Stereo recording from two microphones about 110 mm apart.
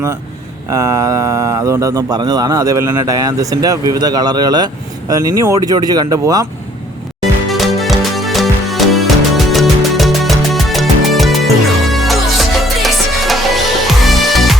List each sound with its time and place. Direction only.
0.7 s speech: 30° right (ahead or behind)
7.4 s music: centre (ahead or behind)